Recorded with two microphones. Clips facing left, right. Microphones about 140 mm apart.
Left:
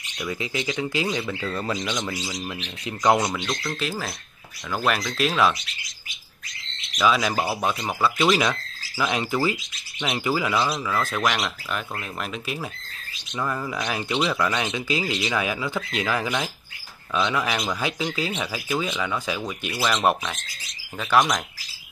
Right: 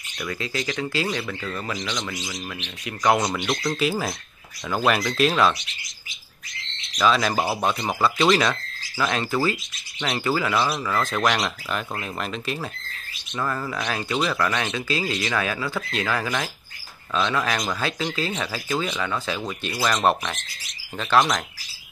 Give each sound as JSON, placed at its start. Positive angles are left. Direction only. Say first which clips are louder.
{"t": 0.2, "sound": "speech", "louder": "even", "side_deg": 15}
{"t": 3.3, "sound": "speech", "louder": "right 3 dB", "side_deg": -15}
{"t": 4.8, "sound": "speech", "louder": "right 3 dB", "side_deg": 0}
{"t": 7.0, "sound": "speech", "louder": "right 1 dB", "side_deg": 5}